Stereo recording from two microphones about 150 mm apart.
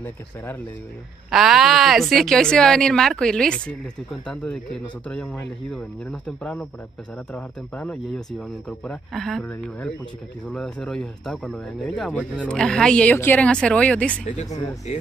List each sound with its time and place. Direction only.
1.3 s speech: centre (ahead or behind)
14.2 s speech: 50° left (ahead or behind)